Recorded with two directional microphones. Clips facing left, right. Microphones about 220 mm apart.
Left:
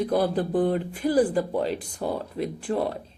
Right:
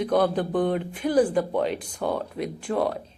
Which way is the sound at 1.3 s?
35° left (ahead or behind).